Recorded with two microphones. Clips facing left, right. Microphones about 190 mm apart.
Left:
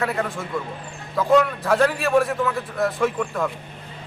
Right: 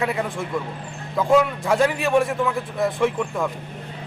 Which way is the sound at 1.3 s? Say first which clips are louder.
Even; 10° right (ahead or behind).